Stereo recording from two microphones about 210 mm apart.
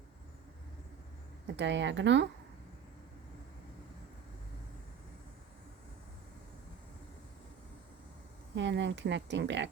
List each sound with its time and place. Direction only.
1.5 s speech: 60° right (ahead or behind)
8.5 s speech: 60° right (ahead or behind)